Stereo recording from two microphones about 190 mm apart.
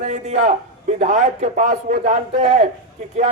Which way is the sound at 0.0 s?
40° right (ahead or behind).